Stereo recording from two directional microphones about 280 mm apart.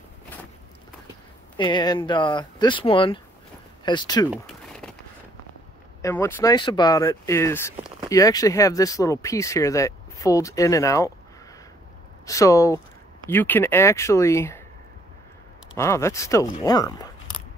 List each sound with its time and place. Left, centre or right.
1.6 s speech: centre
4.3 s a sound: centre
6.0 s speech: centre
12.3 s speech: centre
15.7 s speech: centre